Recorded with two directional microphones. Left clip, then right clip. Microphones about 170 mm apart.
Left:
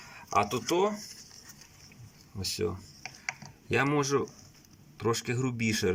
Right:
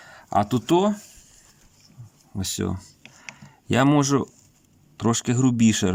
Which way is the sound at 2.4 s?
80° right.